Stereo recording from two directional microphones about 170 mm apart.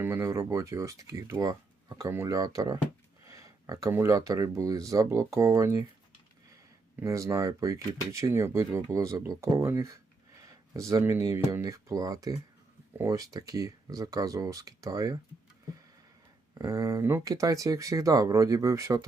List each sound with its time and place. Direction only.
0.0 s speech: 15° right (ahead or behind)
7.0 s speech: 20° right (ahead or behind)
16.6 s speech: 20° right (ahead or behind)